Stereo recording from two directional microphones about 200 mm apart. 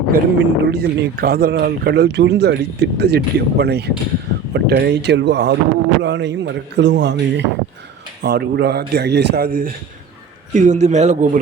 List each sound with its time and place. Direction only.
0.1 s a man's voice: 50° right (ahead or behind); by 11.3 s 35° right (ahead or behind)